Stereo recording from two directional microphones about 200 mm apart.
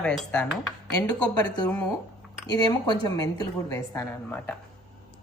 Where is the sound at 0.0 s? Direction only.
5° left (ahead or behind).